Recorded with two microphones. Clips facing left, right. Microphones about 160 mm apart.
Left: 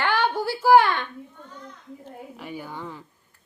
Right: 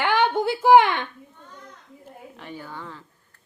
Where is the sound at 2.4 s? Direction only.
10° left (ahead or behind).